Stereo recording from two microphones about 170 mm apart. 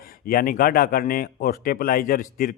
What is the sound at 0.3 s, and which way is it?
A man's voice, 55° left (ahead or behind).